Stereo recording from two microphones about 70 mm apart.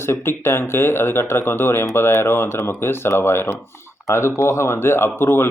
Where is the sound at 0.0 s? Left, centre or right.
Left.